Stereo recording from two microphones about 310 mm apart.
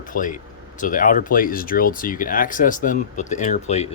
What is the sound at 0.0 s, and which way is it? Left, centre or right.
Speech, left.